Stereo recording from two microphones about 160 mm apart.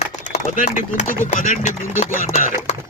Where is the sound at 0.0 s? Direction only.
50° left (ahead or behind).